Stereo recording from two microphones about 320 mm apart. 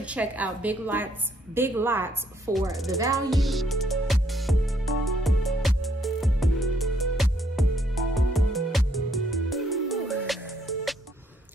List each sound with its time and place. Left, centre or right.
0.0 s a woman's voice: centre
3.0 s speech: centre
3.3 s music: centre